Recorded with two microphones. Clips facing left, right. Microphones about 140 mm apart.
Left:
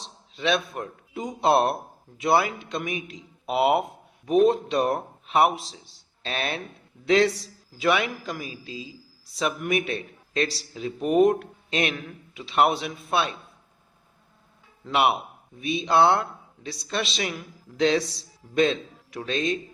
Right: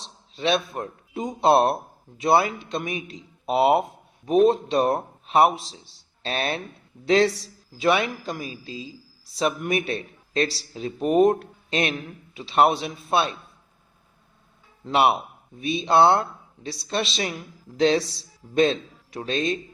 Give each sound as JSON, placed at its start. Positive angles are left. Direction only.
{"t": 0.3, "sound": "a man's voice", "side_deg": -30}
{"t": 14.8, "sound": "a man's voice", "side_deg": -30}